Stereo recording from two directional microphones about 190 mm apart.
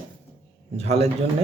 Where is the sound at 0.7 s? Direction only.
35° right (ahead or behind).